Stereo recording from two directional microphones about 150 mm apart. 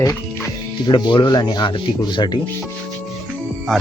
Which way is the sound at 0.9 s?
30° left (ahead or behind).